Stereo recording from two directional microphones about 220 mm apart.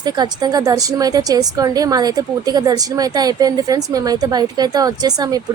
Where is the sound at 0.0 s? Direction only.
20° right (ahead or behind).